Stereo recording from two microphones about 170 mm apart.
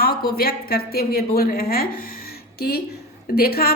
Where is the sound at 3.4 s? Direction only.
60° left (ahead or behind).